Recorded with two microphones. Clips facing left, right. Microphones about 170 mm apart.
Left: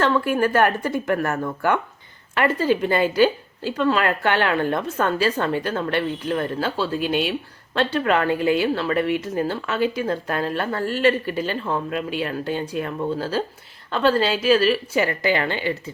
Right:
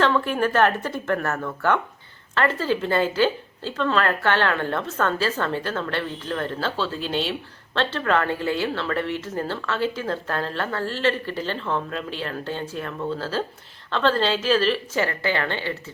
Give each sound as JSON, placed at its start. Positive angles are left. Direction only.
{"t": 0.0, "sound": "a woman's voice", "side_deg": 10}